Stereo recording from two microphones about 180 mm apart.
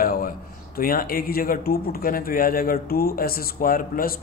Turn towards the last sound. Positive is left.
turn(degrees=55)  # may be behind; listen again after turning